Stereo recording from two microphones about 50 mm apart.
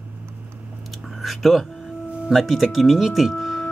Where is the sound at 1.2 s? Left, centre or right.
Centre.